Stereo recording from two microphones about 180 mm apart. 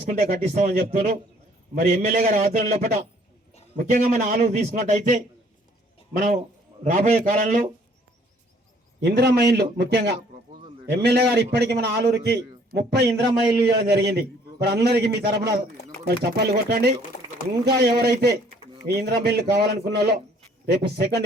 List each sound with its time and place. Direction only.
0.0 s a man's voice: 50° right (ahead or behind)
9.0 s a man's voice: 65° right (ahead or behind)